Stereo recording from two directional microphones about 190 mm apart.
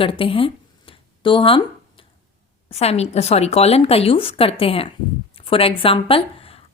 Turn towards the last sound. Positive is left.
turn(degrees=30)  # may be behind; listen again after turning